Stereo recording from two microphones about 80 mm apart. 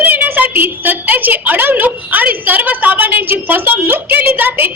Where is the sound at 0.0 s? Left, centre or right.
Right.